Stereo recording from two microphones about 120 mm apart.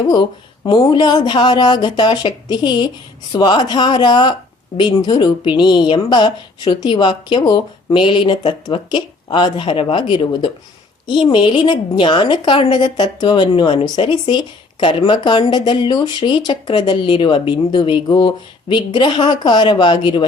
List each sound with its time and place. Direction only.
0.1 s a woman's voice: 40° left (ahead or behind)